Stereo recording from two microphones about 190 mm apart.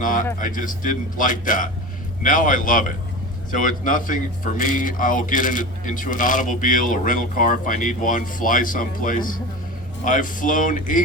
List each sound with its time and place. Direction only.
0.3 s speech: 45° left (ahead or behind)